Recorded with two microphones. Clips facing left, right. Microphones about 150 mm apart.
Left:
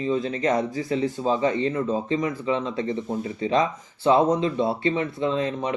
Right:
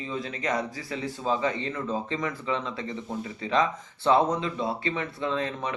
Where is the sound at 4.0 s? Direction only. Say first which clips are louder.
Left 4 dB; 20° left (ahead or behind).